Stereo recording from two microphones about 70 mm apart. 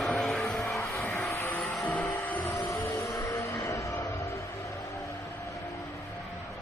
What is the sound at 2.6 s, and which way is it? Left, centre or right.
Vehicle, left.